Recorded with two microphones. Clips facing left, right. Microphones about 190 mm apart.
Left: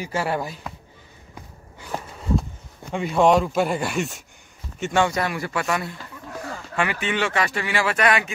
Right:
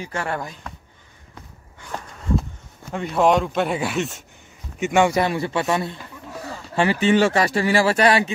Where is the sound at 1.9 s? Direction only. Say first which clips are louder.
Left 2 dB; 10° left (ahead or behind).